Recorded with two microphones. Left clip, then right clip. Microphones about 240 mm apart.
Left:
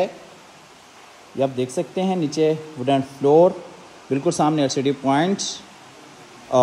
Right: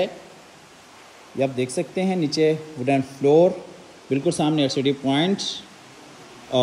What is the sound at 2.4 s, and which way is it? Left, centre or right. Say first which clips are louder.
Speech: left 1 dB; left.